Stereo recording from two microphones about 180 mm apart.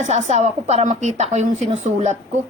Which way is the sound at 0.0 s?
40° right (ahead or behind).